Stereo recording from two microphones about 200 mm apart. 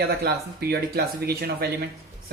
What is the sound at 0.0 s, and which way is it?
Speech, 50° right (ahead or behind).